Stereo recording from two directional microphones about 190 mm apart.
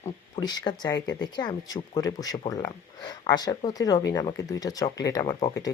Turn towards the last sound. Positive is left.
turn(degrees=20)  # may be behind; listen again after turning